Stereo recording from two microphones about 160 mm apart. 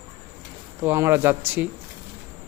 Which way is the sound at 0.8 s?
15° right (ahead or behind).